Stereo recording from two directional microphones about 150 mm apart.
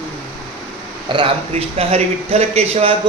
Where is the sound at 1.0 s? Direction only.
35° right (ahead or behind).